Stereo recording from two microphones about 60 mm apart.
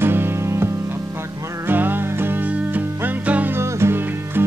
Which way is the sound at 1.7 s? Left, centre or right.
Right.